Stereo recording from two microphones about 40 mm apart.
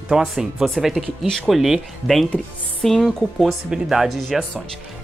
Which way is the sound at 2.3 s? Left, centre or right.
Left.